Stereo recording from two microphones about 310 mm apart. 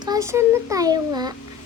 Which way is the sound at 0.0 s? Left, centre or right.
Centre.